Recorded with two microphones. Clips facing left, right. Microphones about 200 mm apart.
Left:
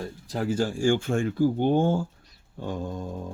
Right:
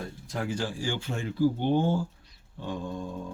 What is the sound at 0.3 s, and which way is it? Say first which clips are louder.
Speech: left 6 dB; 40° left (ahead or behind).